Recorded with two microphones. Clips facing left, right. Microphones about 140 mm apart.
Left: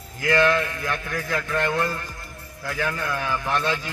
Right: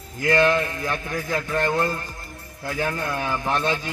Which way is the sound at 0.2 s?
25° right (ahead or behind).